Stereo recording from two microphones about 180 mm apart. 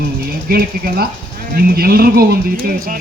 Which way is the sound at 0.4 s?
55° right (ahead or behind).